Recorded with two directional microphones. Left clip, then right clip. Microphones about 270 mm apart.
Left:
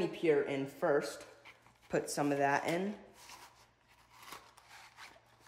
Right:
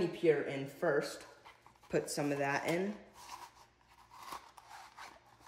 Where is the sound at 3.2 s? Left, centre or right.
Centre.